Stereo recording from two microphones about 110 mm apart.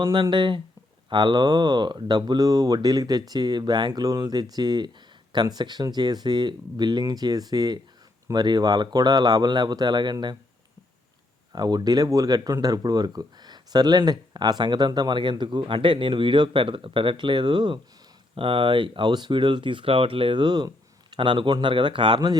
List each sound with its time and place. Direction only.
0.0 s speech: 45° right (ahead or behind)
11.5 s speech: 40° right (ahead or behind)